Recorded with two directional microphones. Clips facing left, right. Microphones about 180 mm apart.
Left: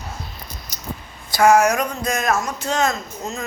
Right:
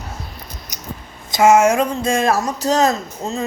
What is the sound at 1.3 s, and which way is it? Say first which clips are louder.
Speech: right 2 dB; 20° right (ahead or behind).